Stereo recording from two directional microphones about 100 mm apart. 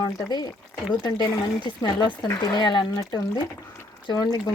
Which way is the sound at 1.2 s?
50° left (ahead or behind).